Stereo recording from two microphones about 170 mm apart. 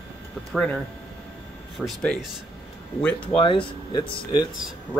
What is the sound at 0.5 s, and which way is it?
Speech, 5° left (ahead or behind).